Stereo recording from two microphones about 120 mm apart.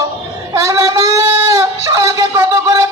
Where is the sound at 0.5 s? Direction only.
25° right (ahead or behind).